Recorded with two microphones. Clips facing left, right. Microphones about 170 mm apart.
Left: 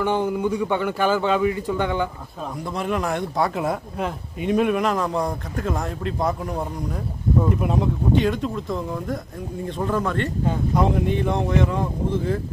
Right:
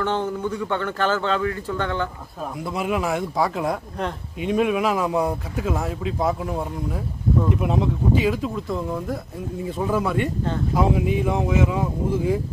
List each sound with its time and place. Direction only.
0.0 s speech: 10° left (ahead or behind)
2.6 s speech: 5° right (ahead or behind)